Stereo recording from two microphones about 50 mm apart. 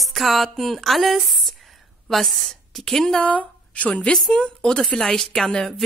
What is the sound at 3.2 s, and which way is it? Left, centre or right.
A woman's voice, left.